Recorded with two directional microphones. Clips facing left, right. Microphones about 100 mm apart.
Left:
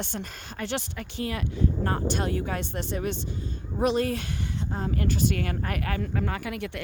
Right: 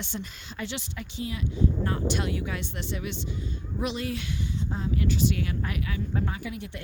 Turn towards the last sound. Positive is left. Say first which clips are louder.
# left 4 dB
turn(degrees=70)  # may be behind; listen again after turning